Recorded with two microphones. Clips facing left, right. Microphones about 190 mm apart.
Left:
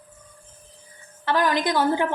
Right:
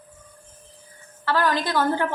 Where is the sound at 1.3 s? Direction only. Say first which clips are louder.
Left 1 dB; 15° left (ahead or behind).